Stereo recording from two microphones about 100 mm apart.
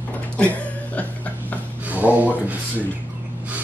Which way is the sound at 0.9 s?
15° left (ahead or behind).